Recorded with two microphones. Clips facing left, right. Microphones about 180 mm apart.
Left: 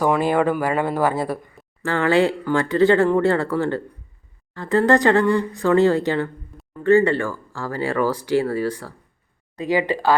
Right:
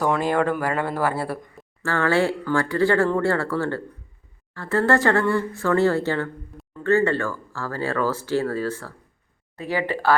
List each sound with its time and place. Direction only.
0.0 s speech: 10° left (ahead or behind)